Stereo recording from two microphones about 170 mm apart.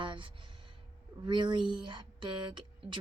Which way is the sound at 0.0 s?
30° right (ahead or behind).